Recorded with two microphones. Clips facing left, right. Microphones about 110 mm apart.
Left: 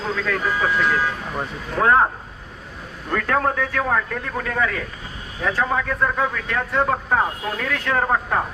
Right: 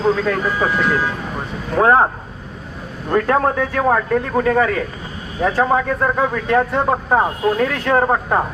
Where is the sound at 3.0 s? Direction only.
30° right (ahead or behind).